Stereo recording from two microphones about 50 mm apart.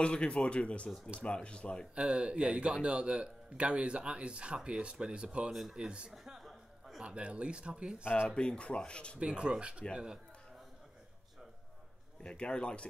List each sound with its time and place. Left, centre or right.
0.0 s speech: left
2.0 s a man's voice: right
5.5 s speech: centre
5.9 s a man's voice: centre
6.2 s a sound: centre
7.0 s a man's voice: right
8.0 s speech: left
8.3 s speech: centre
9.2 s a man's voice: centre
12.2 s speech: centre